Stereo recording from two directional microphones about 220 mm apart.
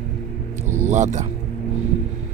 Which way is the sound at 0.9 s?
35° right (ahead or behind).